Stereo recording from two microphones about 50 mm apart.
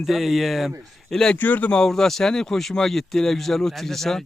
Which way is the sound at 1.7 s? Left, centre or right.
Centre.